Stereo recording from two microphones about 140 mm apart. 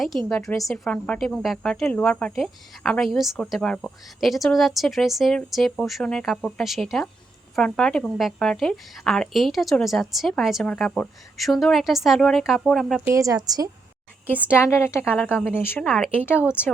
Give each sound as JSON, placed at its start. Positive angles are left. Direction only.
{"t": 0.3, "sound": "a woman's voice", "side_deg": 0}
{"t": 13.1, "sound": "a woman's voice", "side_deg": -25}
{"t": 14.5, "sound": "a woman's voice", "side_deg": 20}
{"t": 15.9, "sound": "a woman's voice", "side_deg": 5}